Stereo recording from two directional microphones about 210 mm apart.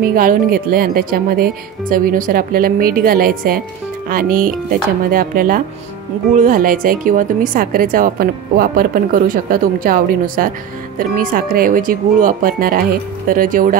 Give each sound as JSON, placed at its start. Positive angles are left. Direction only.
{"t": 0.0, "sound": "speech", "side_deg": -45}